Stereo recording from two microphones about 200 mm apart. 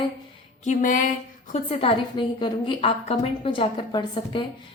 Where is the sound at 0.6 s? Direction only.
40° left (ahead or behind).